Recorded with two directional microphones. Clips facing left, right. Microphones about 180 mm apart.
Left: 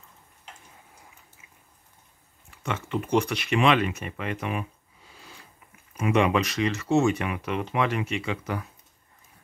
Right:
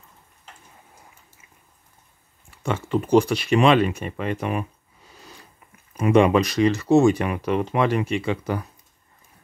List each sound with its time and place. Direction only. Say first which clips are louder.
2.6 s speech: right 6 dB; 35° right (ahead or behind)
5.9 s speech: right 6 dB; 35° right (ahead or behind)